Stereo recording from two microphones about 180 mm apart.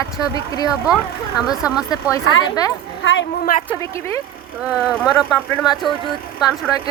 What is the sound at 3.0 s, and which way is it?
Speech, 90° left.